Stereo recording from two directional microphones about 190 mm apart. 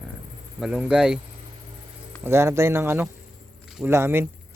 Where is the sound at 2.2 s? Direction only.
15° right (ahead or behind).